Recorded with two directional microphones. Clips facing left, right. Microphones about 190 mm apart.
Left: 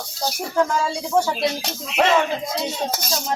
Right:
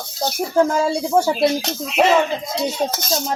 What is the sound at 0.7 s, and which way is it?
Speech, 35° right (ahead or behind).